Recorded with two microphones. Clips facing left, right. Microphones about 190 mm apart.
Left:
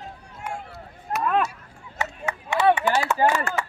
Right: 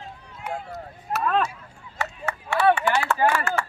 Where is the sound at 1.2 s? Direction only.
5° left (ahead or behind).